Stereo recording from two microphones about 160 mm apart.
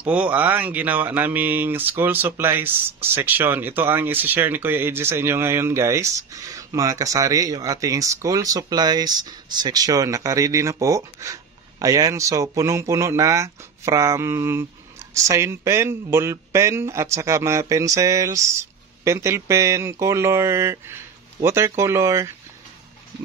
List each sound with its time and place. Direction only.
0.0 s speech: 10° right (ahead or behind)